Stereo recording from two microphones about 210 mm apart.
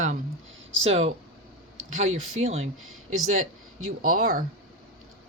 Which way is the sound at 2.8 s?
80° right.